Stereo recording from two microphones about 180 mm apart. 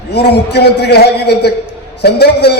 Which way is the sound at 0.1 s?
65° left (ahead or behind).